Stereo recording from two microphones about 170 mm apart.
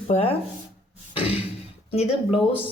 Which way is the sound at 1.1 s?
35° left (ahead or behind).